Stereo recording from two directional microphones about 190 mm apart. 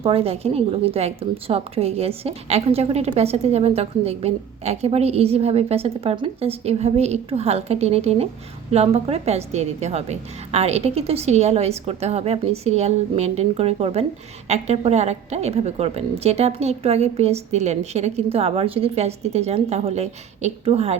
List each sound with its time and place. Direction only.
0.0 s a woman's voice: 30° right (ahead or behind)